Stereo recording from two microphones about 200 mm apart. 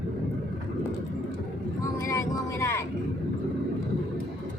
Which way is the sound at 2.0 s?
15° left (ahead or behind).